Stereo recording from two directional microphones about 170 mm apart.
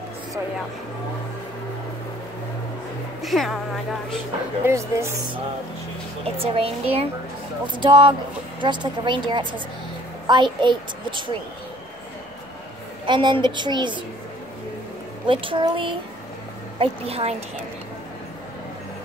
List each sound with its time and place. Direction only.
3.2 s speech: centre (ahead or behind)
4.6 s speech: 15° right (ahead or behind)
6.2 s a child's voice: 35° right (ahead or behind)
13.0 s a child's voice: 25° right (ahead or behind)
15.2 s speech: 30° right (ahead or behind)